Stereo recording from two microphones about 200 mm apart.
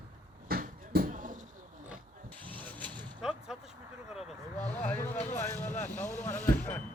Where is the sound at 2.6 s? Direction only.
Centre (ahead or behind).